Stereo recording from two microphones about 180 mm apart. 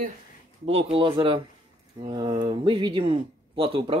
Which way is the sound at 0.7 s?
30° right (ahead or behind).